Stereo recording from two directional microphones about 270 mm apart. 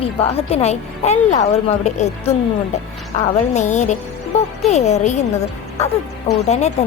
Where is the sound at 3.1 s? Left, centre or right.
Left.